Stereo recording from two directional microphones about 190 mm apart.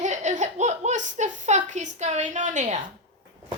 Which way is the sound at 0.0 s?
40° right (ahead or behind).